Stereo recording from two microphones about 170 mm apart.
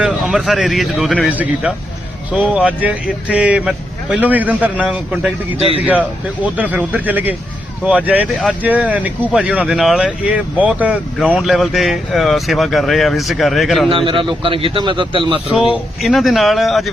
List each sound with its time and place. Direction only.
0.0 s speech: 5° right (ahead or behind)
1.3 s speech: 10° right (ahead or behind)
5.5 s speech: 35° right (ahead or behind)
6.4 s speech: 10° right (ahead or behind)
13.9 s a man's voice: 30° right (ahead or behind)
15.7 s speech: centre (ahead or behind)